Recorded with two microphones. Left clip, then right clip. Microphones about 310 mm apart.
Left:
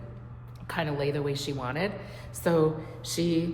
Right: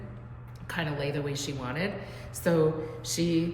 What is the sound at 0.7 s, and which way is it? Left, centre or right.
A woman's voice, centre.